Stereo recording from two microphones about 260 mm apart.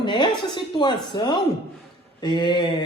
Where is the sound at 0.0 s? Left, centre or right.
Centre.